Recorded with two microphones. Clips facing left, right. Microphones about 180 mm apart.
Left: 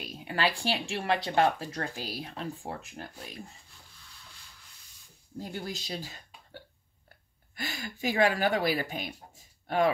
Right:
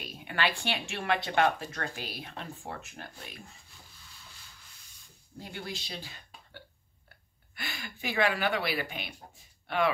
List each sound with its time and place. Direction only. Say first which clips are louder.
0.2 s speech: left 2 dB; 35° left (ahead or behind)
5.4 s speech: left 3 dB; 40° left (ahead or behind)